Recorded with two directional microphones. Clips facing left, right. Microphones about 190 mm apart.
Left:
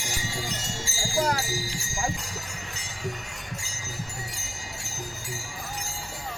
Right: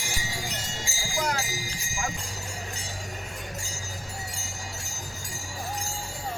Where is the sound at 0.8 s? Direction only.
15° right (ahead or behind).